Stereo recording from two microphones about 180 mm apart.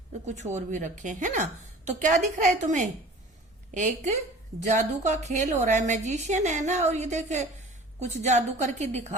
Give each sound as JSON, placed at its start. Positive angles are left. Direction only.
{"t": 0.3, "sound": "a woman's voice", "side_deg": -40}